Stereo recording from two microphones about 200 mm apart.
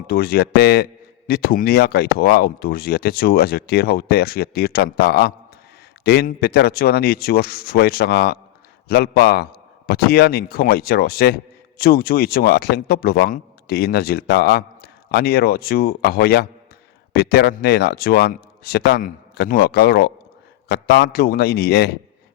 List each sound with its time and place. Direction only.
0.1 s speech: 50° left (ahead or behind)